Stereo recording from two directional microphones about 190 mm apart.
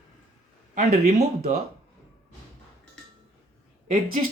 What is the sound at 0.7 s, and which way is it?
Speech, 35° right (ahead or behind).